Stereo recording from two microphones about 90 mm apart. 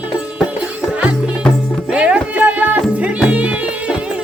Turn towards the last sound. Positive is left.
turn(degrees=-15)  # may be behind; listen again after turning